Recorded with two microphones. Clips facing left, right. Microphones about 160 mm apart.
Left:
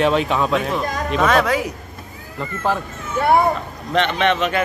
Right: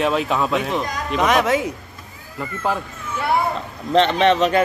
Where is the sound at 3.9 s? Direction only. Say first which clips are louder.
Right 3 dB; 35° right (ahead or behind).